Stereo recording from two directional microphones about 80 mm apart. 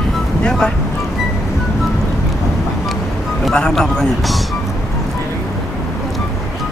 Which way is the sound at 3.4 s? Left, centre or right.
Centre.